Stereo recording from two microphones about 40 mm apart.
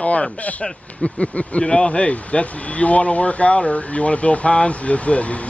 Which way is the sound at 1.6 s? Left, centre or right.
Centre.